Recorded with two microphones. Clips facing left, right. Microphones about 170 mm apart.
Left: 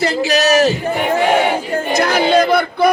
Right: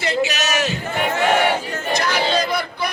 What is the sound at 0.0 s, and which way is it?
Battle cry, 35° left (ahead or behind).